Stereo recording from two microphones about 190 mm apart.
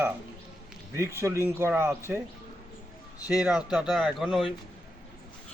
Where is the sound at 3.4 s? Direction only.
5° right (ahead or behind).